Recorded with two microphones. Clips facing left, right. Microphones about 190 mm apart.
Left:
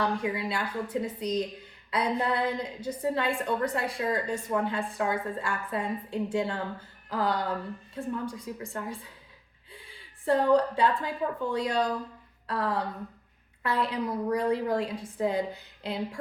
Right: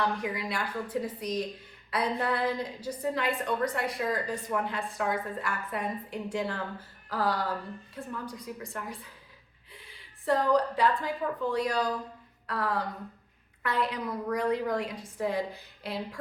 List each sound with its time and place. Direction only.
0.2 s a woman's voice: 25° left (ahead or behind)
10.2 s a woman's voice: 30° left (ahead or behind)